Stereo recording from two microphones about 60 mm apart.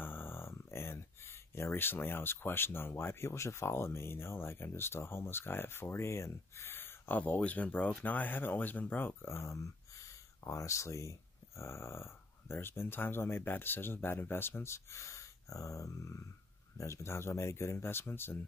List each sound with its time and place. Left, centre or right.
0.0 s speech: left
7.2 s speech: left